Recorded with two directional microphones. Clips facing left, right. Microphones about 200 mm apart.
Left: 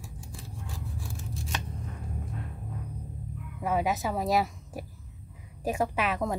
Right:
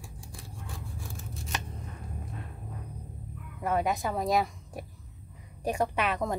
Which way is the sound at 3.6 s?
Centre (ahead or behind).